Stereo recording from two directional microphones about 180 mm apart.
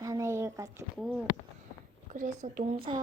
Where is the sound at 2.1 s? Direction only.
45° right (ahead or behind).